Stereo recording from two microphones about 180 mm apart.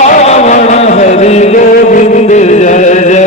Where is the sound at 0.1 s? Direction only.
35° left (ahead or behind).